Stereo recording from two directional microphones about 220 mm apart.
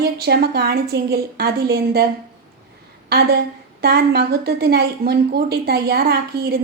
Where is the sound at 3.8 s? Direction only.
45° right (ahead or behind).